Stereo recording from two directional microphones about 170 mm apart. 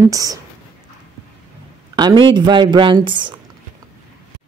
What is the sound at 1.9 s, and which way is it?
Speech, 25° right (ahead or behind).